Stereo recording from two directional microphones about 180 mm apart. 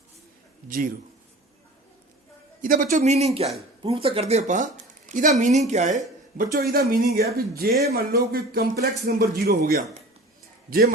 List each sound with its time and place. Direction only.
0.7 s a woman's voice: 50° right (ahead or behind)
2.6 s a woman's voice: 50° right (ahead or behind)